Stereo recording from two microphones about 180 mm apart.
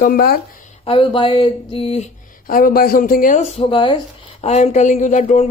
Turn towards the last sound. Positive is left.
turn(degrees=40)  # may be behind; listen again after turning